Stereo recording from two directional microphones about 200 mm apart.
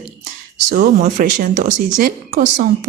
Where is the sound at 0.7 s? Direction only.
45° right (ahead or behind).